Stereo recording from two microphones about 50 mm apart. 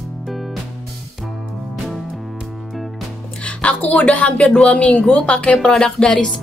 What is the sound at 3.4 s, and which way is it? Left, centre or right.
Music, left.